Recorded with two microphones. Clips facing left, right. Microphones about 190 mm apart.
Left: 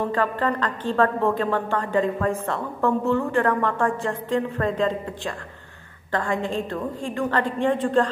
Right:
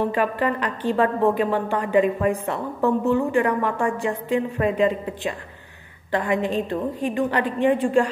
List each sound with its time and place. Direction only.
0.1 s a woman's voice: 15° right (ahead or behind)